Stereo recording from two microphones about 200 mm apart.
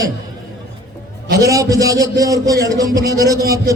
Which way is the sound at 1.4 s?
15° right (ahead or behind).